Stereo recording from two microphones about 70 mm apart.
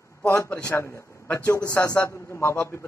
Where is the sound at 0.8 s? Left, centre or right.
Left.